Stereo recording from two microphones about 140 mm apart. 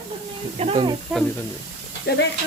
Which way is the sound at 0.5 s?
45° right (ahead or behind).